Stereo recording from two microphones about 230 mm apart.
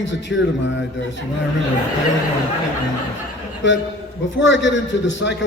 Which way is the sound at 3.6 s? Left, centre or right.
Left.